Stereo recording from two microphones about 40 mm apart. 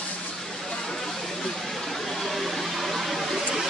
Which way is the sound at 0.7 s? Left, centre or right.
Centre.